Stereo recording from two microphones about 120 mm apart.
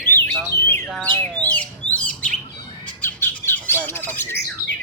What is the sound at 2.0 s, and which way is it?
Chirp, 10° left (ahead or behind).